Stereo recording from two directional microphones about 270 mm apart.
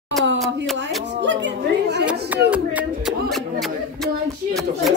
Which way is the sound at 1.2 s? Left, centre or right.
Right.